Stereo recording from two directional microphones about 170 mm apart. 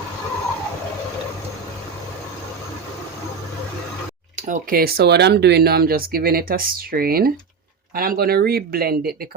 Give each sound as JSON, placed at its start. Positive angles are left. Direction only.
{"t": 4.4, "sound": "speech", "side_deg": -55}